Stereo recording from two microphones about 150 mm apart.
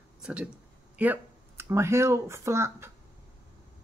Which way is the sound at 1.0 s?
15° right (ahead or behind).